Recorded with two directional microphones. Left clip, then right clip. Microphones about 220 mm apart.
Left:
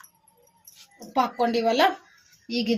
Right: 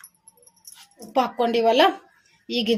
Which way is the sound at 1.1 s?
30° right (ahead or behind).